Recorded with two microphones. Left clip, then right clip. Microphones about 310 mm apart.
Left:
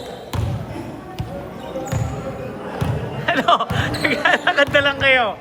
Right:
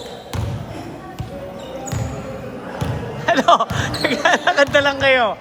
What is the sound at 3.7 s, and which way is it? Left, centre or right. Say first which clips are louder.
Basketball bounce: even; centre.